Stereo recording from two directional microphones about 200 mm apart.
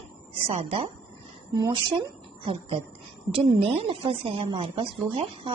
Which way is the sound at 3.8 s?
25° right (ahead or behind).